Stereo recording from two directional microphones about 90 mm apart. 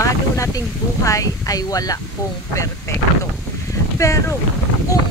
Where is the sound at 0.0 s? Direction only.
40° left (ahead or behind).